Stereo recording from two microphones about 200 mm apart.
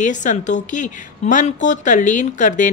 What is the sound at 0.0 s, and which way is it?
A woman's voice, 40° left (ahead or behind).